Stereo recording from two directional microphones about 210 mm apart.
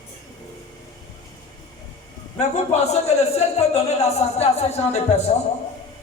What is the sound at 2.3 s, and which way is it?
A man's voice, 30° left (ahead or behind).